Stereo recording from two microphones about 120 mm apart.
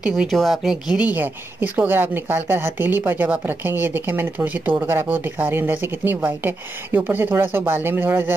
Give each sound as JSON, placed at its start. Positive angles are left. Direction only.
{"t": 0.0, "sound": "speech", "side_deg": -5}